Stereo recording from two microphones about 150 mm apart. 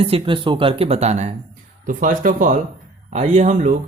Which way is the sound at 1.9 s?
60° right (ahead or behind).